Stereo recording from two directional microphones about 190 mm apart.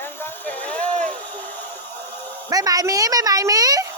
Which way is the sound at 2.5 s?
20° right (ahead or behind).